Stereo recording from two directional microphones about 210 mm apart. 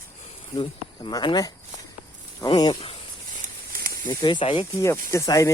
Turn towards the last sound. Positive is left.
turn(degrees=15)  # may be behind; listen again after turning